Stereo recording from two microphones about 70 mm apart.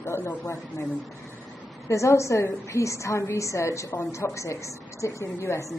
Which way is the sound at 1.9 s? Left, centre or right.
Left.